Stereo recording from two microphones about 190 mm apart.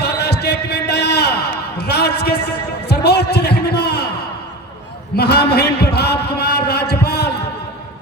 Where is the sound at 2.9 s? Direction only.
60° left (ahead or behind).